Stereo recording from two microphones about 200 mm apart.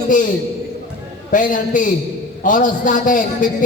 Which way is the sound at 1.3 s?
40° left (ahead or behind).